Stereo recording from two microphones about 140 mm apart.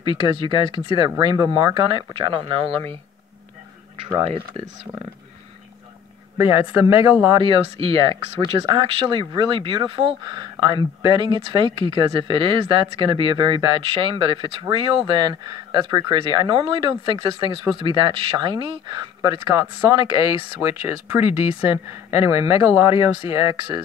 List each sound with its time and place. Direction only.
0.0 s speech: 35° right (ahead or behind)
6.3 s speech: 20° right (ahead or behind)
7.3 s speech: 40° right (ahead or behind)
20.6 s speech: 15° right (ahead or behind)